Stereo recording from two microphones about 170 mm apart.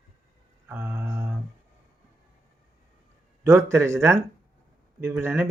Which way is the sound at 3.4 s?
15° right (ahead or behind).